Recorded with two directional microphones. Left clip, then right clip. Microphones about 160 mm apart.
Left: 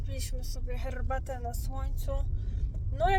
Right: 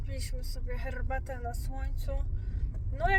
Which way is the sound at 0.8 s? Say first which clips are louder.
Left 2 dB; 20° left (ahead or behind).